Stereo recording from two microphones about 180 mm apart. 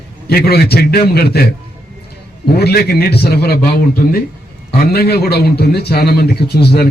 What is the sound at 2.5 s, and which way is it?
A man's voice, 60° left (ahead or behind).